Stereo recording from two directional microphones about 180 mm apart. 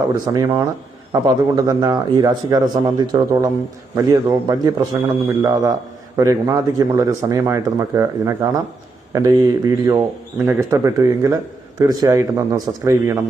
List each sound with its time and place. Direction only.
0.1 s a man's voice: 20° right (ahead or behind)